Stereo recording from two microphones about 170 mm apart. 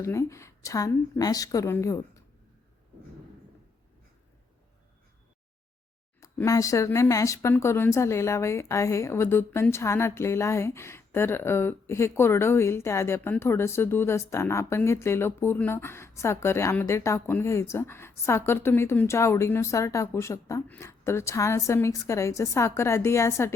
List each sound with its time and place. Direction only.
0.0 s speech: 15° left (ahead or behind)
6.1 s speech: 20° left (ahead or behind)